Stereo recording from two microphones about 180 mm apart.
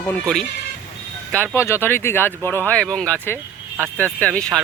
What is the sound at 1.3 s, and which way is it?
Speech, 10° left (ahead or behind).